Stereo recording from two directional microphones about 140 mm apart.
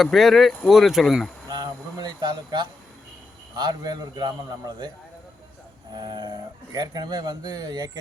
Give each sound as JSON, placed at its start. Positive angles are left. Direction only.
{"t": 0.0, "sound": "speech", "side_deg": 0}
{"t": 1.5, "sound": "a man's voice", "side_deg": -30}
{"t": 5.9, "sound": "speech", "side_deg": -30}